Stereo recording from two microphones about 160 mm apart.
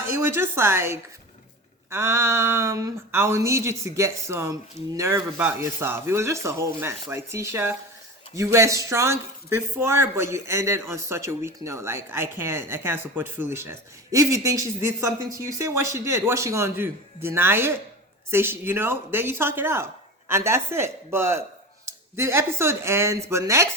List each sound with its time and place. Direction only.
0.1 s speech: 15° right (ahead or behind)